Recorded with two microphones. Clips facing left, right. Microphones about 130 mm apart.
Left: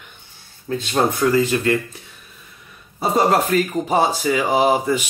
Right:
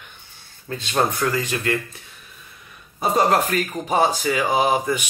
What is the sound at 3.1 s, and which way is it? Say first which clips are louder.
Speech: left 2 dB; 15° left (ahead or behind).